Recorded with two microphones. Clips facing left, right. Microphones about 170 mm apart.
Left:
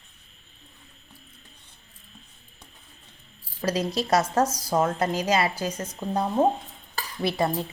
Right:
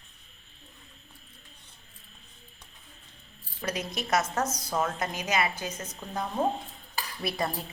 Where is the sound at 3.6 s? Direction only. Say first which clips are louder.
Left 7 dB; 30° left (ahead or behind).